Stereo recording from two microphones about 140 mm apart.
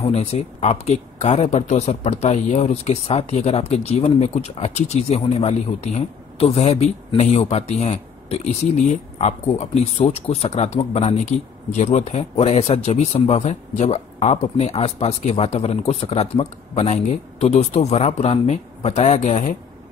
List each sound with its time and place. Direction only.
0.0 s speech: 50° left (ahead or behind)